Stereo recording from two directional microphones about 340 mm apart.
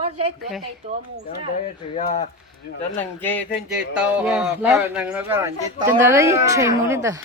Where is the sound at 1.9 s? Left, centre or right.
Left.